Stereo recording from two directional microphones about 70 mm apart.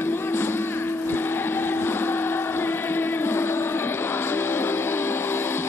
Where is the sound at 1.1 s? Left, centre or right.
Left.